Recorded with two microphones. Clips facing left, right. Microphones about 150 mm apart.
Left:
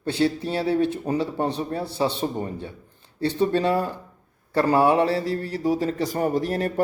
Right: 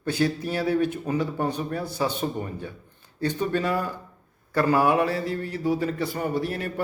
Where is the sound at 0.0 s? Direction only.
30° left (ahead or behind).